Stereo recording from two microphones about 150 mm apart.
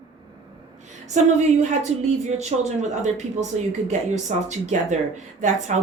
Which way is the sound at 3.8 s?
50° right (ahead or behind).